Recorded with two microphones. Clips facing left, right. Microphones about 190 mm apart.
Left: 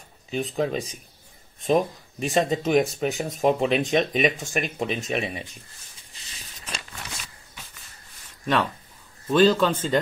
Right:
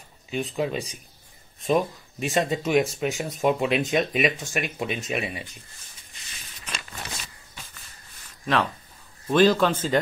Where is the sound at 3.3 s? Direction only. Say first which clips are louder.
Left 2 dB; 40° left (ahead or behind).